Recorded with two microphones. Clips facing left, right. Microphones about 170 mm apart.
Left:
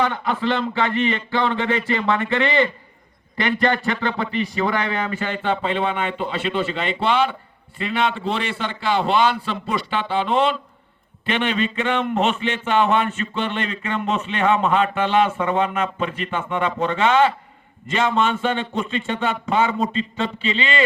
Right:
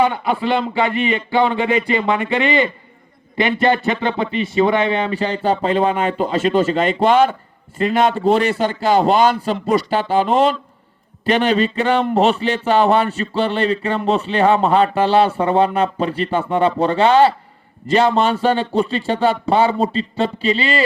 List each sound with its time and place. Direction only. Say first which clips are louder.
0.0 s a man's voice: right 4 dB; 15° right (ahead or behind); by 20.8 s 40° right (ahead or behind)